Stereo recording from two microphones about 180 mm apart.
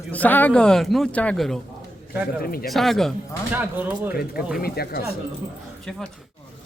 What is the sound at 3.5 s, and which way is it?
Speech, 10° right (ahead or behind).